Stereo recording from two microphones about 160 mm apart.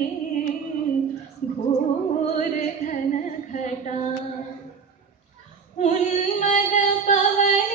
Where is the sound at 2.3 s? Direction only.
55° left (ahead or behind).